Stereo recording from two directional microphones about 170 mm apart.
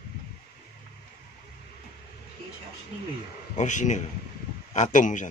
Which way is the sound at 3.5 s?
45° left (ahead or behind).